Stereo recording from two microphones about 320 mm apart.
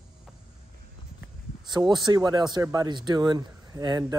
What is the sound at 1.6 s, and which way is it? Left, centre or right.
Speech, centre.